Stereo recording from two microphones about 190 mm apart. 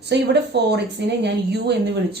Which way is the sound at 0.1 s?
65° right (ahead or behind).